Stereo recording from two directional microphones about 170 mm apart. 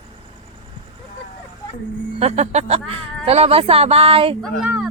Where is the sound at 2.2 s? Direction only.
40° right (ahead or behind).